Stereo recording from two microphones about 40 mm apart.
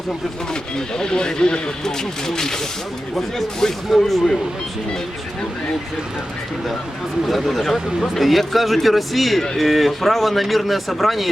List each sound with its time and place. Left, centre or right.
0.9 s speech: centre
7.3 s a man's voice: centre